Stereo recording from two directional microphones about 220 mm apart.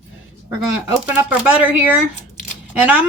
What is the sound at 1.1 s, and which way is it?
Speech, 5° right (ahead or behind).